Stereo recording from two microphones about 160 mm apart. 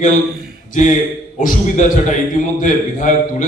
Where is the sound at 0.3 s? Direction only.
70° right (ahead or behind).